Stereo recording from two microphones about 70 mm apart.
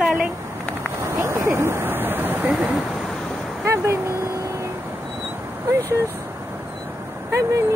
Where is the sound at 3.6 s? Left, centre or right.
Right.